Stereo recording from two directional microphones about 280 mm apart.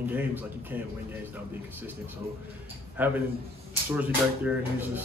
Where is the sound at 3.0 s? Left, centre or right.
Centre.